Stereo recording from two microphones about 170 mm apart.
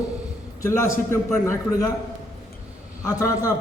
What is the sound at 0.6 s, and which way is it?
A man's voice, 15° left (ahead or behind).